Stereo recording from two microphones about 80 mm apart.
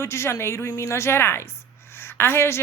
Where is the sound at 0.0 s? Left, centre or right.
Left.